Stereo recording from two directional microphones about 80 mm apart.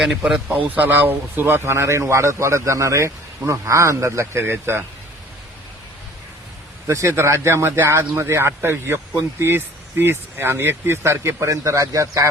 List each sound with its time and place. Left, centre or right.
0.3 s speech: centre
6.8 s speech: right